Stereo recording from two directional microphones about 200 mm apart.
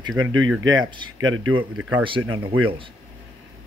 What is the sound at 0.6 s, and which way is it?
Speech, 20° right (ahead or behind).